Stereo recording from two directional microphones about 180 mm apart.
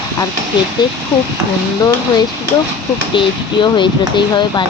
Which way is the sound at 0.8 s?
25° left (ahead or behind).